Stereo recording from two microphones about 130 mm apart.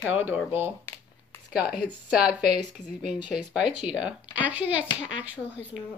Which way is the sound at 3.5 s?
5° right (ahead or behind).